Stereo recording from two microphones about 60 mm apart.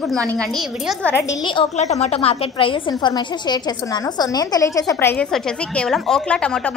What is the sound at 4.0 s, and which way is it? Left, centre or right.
Speech, left.